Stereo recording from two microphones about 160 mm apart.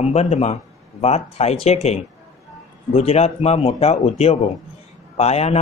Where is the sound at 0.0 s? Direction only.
45° left (ahead or behind).